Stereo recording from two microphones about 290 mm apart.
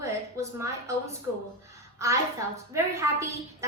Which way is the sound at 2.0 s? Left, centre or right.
Centre.